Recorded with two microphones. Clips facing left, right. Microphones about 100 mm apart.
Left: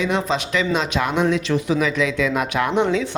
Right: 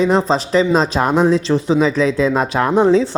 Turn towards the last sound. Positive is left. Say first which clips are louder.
# right 6 dB
turn(degrees=-35)  # may be behind; listen again after turning